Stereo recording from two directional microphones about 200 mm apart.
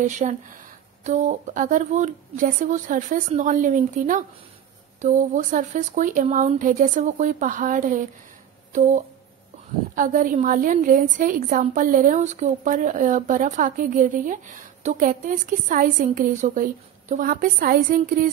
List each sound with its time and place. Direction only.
0.0 s a woman's voice: 40° right (ahead or behind)